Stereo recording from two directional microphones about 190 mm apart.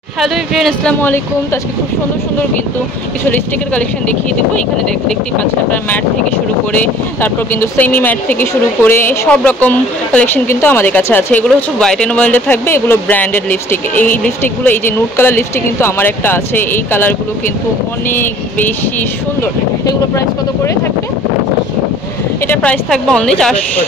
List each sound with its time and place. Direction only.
0.2 s speech: centre (ahead or behind)
5.0 s speech: 10° left (ahead or behind)
18.1 s speech: 10° left (ahead or behind)
22.5 s speech: 5° left (ahead or behind)